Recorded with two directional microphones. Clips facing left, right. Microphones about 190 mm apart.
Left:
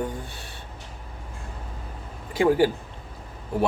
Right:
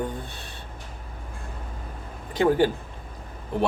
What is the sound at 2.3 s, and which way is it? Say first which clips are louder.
Speech: left 1 dB; 10° left (ahead or behind).